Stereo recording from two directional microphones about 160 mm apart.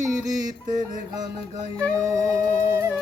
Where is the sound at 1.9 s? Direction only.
20° right (ahead or behind).